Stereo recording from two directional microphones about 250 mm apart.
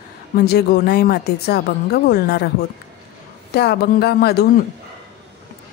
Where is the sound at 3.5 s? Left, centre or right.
Left.